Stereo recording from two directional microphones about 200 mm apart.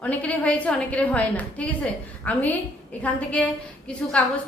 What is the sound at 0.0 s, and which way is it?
A woman's voice, 5° left (ahead or behind).